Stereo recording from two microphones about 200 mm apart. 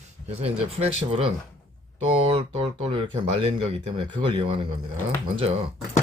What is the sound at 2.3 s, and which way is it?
Speech, 30° right (ahead or behind).